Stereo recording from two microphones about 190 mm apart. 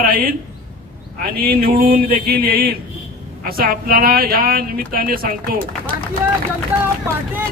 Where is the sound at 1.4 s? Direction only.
50° right (ahead or behind).